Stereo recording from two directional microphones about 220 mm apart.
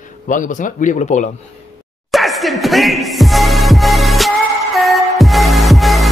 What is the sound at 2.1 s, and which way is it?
Music, centre (ahead or behind).